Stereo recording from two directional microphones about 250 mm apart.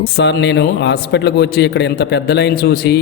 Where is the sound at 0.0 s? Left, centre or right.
Left.